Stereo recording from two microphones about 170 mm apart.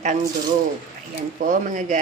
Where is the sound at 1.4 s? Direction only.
50° right (ahead or behind).